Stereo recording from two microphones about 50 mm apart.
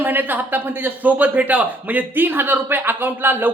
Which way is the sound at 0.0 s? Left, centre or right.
Right.